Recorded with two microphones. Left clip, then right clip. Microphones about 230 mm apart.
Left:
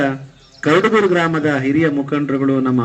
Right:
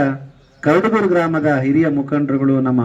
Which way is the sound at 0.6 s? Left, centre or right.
Right.